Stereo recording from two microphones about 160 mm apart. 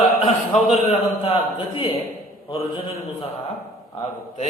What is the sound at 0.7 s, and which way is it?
A man's voice, 35° left (ahead or behind).